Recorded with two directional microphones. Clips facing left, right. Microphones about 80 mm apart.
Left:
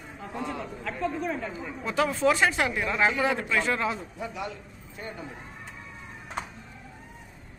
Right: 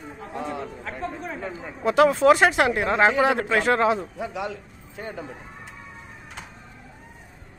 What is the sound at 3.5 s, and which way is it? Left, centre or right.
Speech, right.